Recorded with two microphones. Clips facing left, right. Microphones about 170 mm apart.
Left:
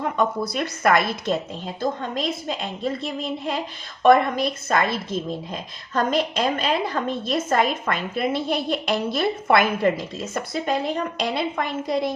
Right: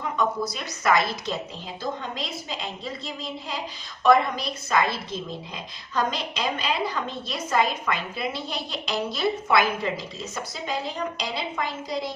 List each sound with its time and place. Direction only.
0.5 s a woman's voice: 55° left (ahead or behind)